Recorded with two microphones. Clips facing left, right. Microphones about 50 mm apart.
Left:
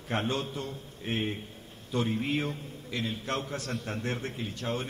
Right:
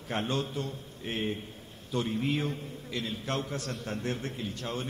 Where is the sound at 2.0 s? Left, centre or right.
Left.